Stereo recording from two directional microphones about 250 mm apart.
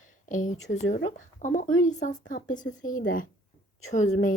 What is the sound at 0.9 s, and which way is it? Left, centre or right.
Speech, left.